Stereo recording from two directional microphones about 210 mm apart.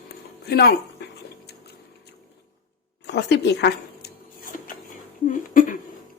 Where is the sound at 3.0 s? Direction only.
55° left (ahead or behind).